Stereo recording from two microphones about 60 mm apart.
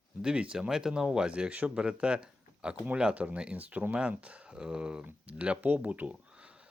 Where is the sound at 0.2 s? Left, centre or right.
Centre.